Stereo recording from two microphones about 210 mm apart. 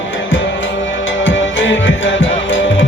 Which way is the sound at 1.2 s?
65° left (ahead or behind).